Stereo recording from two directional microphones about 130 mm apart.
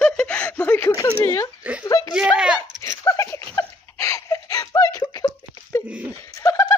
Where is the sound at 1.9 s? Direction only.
30° left (ahead or behind).